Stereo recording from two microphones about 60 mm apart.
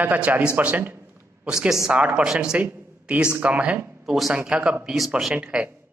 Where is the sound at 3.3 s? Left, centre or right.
Right.